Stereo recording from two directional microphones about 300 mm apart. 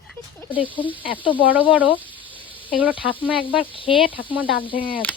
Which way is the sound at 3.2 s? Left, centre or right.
Centre.